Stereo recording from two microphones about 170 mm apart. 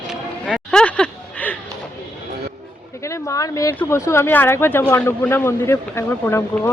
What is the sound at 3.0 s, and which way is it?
Speech, 15° left (ahead or behind).